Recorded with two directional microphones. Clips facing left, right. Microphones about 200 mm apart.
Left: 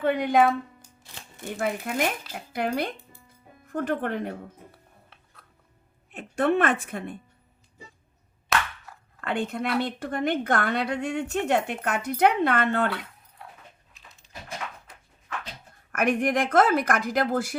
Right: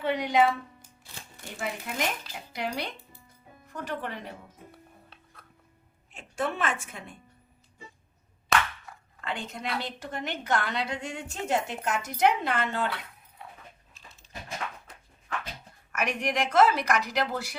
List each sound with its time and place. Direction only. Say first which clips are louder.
0.0 s speech: left 3 dB; 55° left (ahead or behind)
1.5 s speech: left 6 dB; 55° left (ahead or behind)
6.1 s a woman's voice: left 8 dB; 60° left (ahead or behind)
8.5 s clapping: even; centre (ahead or behind)
8.9 s a sound: even; 5° left (ahead or behind)
9.2 s a woman's voice: left 7 dB; 55° left (ahead or behind)
15.9 s speech: left 6 dB; 55° left (ahead or behind)